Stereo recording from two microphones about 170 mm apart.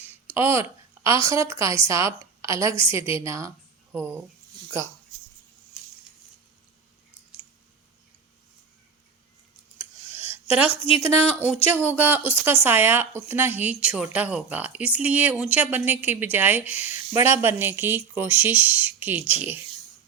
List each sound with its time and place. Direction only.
0.3 s a woman's voice: 15° right (ahead or behind)
9.7 s a sound: 10° right (ahead or behind)
11.1 s a woman's voice: 10° right (ahead or behind)